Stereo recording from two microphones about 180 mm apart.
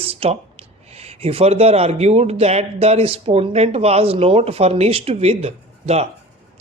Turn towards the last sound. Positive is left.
turn(degrees=-35)  # may be behind; listen again after turning